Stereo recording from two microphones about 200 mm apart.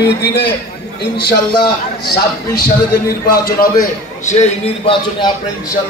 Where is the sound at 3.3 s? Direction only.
50° left (ahead or behind); by 5.3 s 25° left (ahead or behind).